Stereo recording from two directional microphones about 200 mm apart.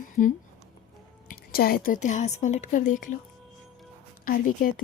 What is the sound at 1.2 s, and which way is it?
A woman's voice, 50° left (ahead or behind).